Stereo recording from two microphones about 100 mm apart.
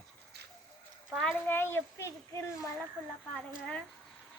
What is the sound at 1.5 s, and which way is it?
Speech, 20° left (ahead or behind).